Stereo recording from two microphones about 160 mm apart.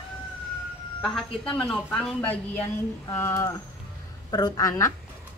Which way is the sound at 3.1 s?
15° left (ahead or behind).